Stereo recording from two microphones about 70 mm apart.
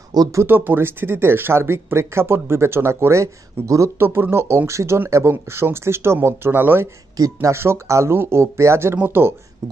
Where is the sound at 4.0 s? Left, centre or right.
Right.